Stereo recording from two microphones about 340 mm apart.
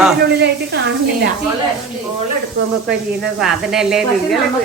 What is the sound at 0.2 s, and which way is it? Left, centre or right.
A woman's voice, right.